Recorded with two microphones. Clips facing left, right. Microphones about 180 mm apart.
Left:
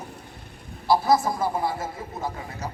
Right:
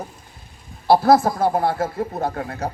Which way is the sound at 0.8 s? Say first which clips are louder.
Right 6 dB; 65° right (ahead or behind).